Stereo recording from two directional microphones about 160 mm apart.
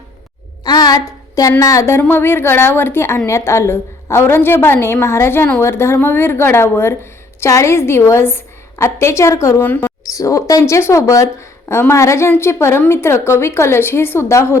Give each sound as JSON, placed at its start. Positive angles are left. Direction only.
{"t": 0.6, "sound": "a woman's voice", "side_deg": 25}